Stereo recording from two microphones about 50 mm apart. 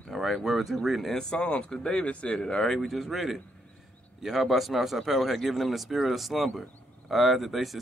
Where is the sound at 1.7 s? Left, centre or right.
Centre.